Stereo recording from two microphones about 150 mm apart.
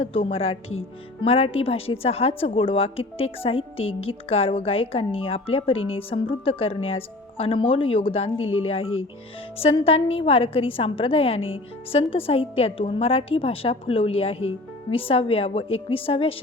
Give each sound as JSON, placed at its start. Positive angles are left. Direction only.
{"t": 0.0, "sound": "a woman's voice", "side_deg": 40}